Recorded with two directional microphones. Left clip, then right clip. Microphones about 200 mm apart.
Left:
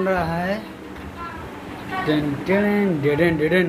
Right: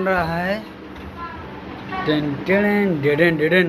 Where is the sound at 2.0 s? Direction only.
10° left (ahead or behind).